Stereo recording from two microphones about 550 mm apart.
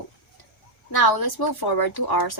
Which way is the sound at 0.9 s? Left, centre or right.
Left.